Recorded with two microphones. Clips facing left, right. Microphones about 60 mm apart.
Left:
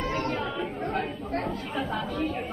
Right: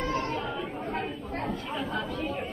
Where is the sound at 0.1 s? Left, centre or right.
Left.